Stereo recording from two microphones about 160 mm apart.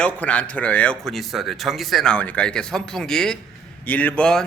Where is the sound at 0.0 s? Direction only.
10° left (ahead or behind).